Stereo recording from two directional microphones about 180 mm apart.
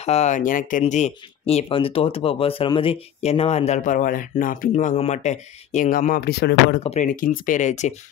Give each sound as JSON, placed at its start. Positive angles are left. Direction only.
{"t": 0.0, "sound": "speech", "side_deg": 35}
{"t": 6.8, "sound": "speech", "side_deg": 35}
{"t": 7.2, "sound": "speech", "side_deg": 45}